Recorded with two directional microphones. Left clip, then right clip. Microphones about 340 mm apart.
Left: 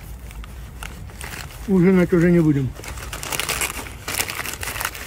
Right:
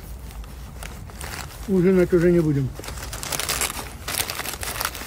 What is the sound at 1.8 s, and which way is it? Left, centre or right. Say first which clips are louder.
Speech: even; centre.